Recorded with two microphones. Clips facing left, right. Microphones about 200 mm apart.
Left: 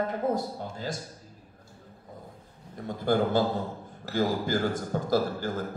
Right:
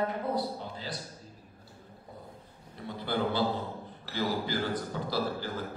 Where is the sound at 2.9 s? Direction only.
45° left (ahead or behind).